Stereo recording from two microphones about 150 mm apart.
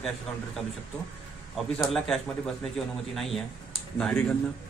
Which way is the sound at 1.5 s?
Centre (ahead or behind).